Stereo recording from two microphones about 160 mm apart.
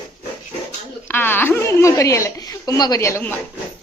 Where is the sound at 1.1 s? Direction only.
15° left (ahead or behind).